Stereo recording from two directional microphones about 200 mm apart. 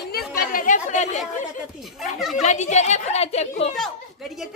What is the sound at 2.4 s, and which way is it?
A woman's voice, 35° left (ahead or behind).